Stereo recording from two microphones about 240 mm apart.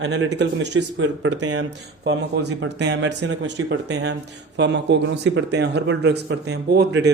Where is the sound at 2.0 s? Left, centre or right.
Right.